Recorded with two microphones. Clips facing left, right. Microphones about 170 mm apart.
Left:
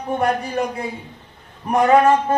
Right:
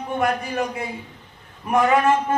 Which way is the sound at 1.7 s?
35° left (ahead or behind).